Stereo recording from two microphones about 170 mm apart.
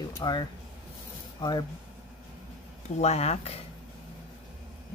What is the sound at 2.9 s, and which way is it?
Speech, 40° left (ahead or behind).